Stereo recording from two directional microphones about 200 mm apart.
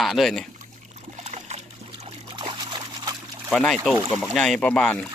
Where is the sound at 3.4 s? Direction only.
5° left (ahead or behind).